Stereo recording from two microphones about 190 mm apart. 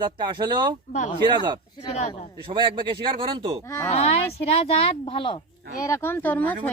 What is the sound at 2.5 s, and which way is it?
Speech, 25° right (ahead or behind).